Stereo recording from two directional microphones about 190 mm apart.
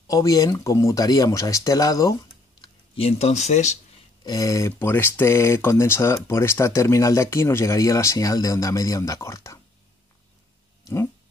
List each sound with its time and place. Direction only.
0.1 s speech: 20° left (ahead or behind); by 3.7 s 35° left (ahead or behind)
4.2 s speech: 20° left (ahead or behind)